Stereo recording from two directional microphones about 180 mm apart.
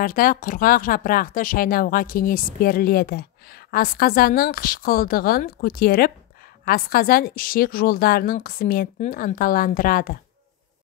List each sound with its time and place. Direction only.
0.0 s speech: 50° left (ahead or behind)